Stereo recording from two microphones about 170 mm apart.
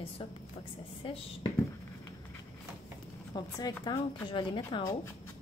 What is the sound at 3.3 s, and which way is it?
Speech, 25° left (ahead or behind).